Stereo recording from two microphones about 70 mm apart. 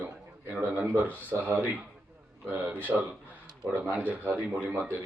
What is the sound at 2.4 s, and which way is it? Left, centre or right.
A man's voice, right.